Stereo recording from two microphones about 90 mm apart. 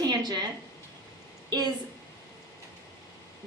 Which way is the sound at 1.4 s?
50° right (ahead or behind).